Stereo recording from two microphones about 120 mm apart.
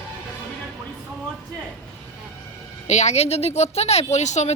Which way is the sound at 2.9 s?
70° left (ahead or behind).